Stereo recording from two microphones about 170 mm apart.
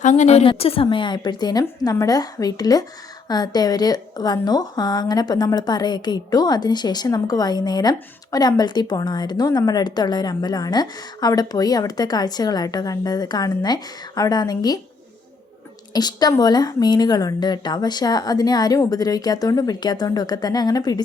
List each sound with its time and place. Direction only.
0.0 s a woman's voice: 45° left (ahead or behind); by 14.8 s 25° left (ahead or behind)
15.9 s a woman's voice: 25° left (ahead or behind)